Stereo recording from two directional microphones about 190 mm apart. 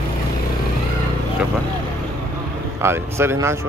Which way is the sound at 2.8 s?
15° right (ahead or behind).